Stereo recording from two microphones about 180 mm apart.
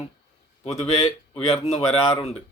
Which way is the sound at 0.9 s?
35° left (ahead or behind).